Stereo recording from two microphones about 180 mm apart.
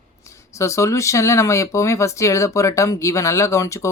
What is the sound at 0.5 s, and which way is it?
Speech, 15° left (ahead or behind).